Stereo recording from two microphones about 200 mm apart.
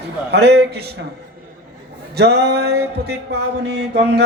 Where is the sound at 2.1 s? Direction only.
55° right (ahead or behind).